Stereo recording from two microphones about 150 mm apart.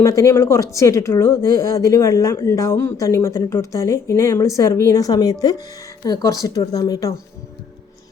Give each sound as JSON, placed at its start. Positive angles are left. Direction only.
{"t": 0.0, "sound": "speech", "side_deg": 20}